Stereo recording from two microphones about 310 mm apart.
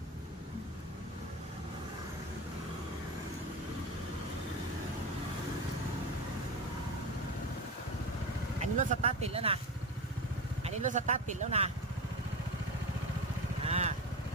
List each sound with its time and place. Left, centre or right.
8.8 s speech: right
10.6 s speech: right
13.7 s vehicle: right